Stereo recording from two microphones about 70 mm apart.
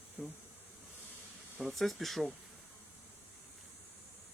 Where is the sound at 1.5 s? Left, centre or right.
Centre.